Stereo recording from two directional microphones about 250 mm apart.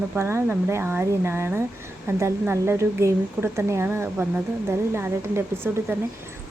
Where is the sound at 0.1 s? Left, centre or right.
Centre.